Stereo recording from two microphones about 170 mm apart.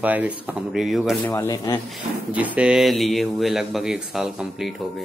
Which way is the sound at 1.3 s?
20° left (ahead or behind).